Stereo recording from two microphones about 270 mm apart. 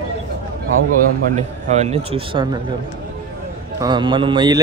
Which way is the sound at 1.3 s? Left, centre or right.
Right.